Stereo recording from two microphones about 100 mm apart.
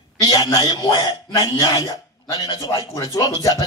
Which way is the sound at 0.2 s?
40° left (ahead or behind).